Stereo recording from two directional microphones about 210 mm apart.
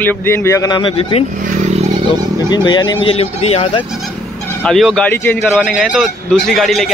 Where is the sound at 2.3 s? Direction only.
20° left (ahead or behind).